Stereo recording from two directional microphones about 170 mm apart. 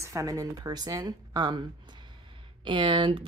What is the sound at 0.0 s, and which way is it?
Speech, 20° right (ahead or behind).